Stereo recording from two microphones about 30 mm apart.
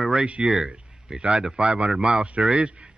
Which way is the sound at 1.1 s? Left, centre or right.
Right.